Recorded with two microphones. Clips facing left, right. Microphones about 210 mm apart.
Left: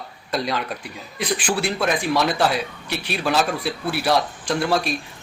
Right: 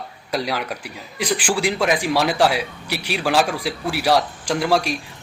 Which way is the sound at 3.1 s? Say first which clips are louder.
Right 2 dB; 90° right.